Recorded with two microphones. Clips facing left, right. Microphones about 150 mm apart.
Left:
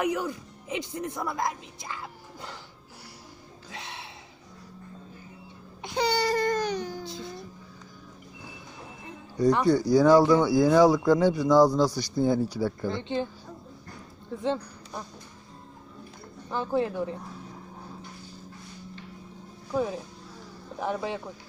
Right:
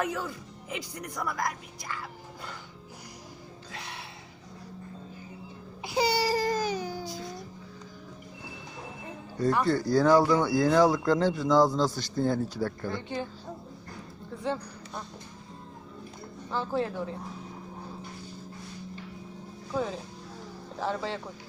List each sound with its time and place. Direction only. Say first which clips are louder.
0.0 s speech: left 4 dB; 15° left (ahead or behind)
3.7 s a sound: left 1 dB; 20° left (ahead or behind)
5.8 s baby cry: even; 5° right (ahead or behind)
9.4 s speech: left 4 dB; 15° left (ahead or behind)
13.0 s a woman's voice: left 5 dB; 20° left (ahead or behind)
16.5 s speech: left 3 dB; 15° left (ahead or behind)
19.7 s speech: left 3 dB; 10° left (ahead or behind)